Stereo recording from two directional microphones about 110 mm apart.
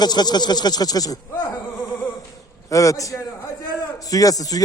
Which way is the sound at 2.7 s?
30° left (ahead or behind).